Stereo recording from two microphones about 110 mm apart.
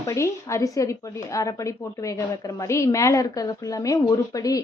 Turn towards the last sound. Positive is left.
turn(degrees=30)  # may be behind; listen again after turning